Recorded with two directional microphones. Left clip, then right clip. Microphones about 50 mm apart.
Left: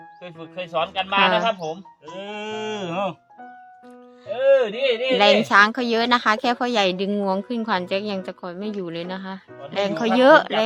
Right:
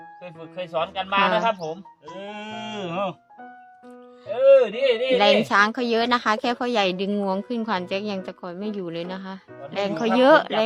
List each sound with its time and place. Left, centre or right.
0.5 s speech: right
1.2 s speech: centre
1.5 s speech: right
2.0 s a woman's voice: centre
4.4 s a sound: right
4.7 s speech: right
5.1 s a woman's voice: centre